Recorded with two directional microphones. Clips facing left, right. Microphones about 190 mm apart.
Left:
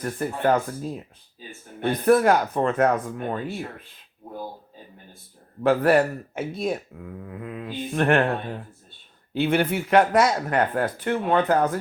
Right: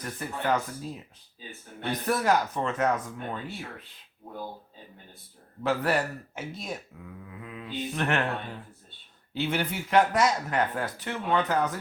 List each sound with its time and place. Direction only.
0.0 s speech: 50° left (ahead or behind)
5.6 s speech: 55° left (ahead or behind)